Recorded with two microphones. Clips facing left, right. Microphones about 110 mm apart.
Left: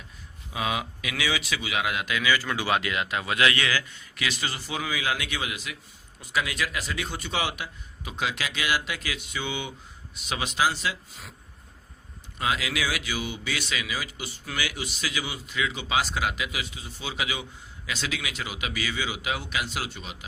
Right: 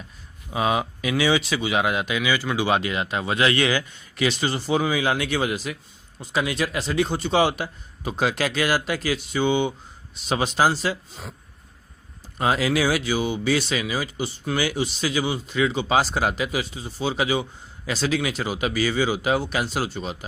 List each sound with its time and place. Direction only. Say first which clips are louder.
0.5 s speech: right 7 dB; 35° right (ahead or behind)
12.4 s speech: right 7 dB; 35° right (ahead or behind)